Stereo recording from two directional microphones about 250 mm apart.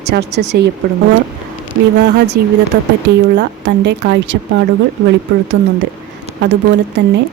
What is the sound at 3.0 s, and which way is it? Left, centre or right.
A woman's voice, right.